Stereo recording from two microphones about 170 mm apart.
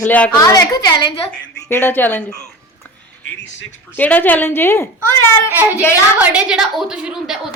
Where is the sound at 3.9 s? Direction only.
10° left (ahead or behind).